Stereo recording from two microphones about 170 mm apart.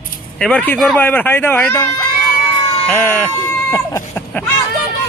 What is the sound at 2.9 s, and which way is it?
Speech, 10° left (ahead or behind).